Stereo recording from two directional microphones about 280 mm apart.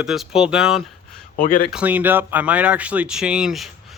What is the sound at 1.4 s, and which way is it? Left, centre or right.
Speech, left.